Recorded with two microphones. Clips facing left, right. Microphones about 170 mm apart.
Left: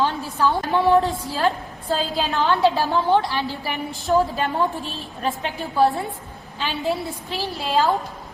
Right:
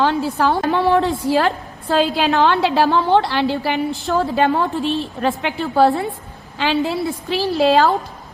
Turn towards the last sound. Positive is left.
turn(degrees=-75)  # may be behind; listen again after turning